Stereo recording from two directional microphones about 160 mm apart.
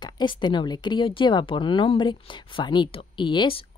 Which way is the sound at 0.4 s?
30° left (ahead or behind).